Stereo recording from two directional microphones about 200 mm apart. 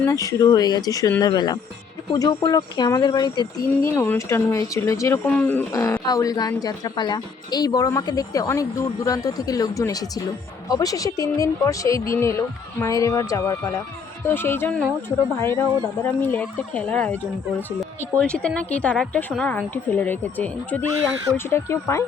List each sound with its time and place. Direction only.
0.0 s speech: 15° left (ahead or behind)
3.8 s speech: 10° left (ahead or behind)
18.2 s speech: 5° left (ahead or behind)